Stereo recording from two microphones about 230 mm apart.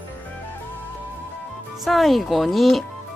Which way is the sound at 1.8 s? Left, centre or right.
Centre.